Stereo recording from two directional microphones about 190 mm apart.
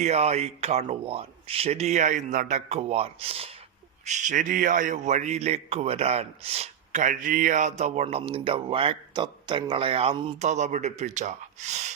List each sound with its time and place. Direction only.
0.0 s a man's voice: 35° right (ahead or behind)